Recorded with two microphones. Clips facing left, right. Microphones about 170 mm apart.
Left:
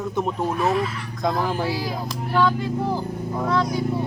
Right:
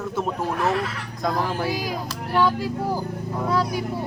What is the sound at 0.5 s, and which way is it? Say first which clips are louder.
Speech: left 2 dB; 65° right (ahead or behind).